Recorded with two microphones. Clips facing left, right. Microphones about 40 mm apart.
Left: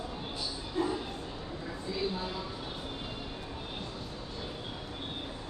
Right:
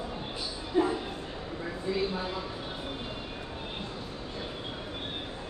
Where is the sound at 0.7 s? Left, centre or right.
Centre.